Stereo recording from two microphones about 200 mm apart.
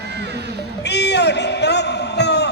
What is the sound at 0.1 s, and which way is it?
Music, 55° right (ahead or behind).